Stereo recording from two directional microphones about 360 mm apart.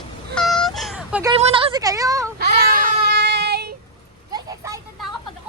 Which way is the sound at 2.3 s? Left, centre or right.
Right.